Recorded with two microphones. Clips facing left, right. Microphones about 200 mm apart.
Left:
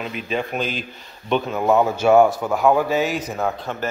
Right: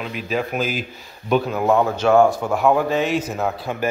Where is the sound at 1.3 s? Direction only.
5° right (ahead or behind).